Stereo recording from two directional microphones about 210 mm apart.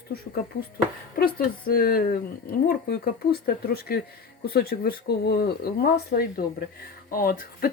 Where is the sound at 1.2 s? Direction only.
45° left (ahead or behind).